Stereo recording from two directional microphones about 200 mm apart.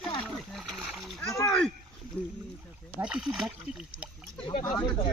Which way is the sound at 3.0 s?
5° right (ahead or behind).